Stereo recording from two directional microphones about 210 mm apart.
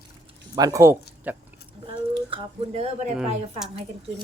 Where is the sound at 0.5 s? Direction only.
15° right (ahead or behind).